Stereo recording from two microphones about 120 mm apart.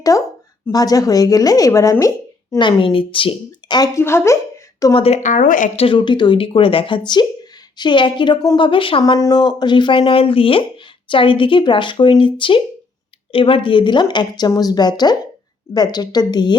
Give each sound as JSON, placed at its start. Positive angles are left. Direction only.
{"t": 0.1, "sound": "speech", "side_deg": 25}
{"t": 2.6, "sound": "speech", "side_deg": 45}
{"t": 3.9, "sound": "a woman's voice", "side_deg": 20}
{"t": 4.9, "sound": "a woman's voice", "side_deg": 60}
{"t": 5.8, "sound": "speech", "side_deg": 45}
{"t": 9.1, "sound": "a woman's voice", "side_deg": 35}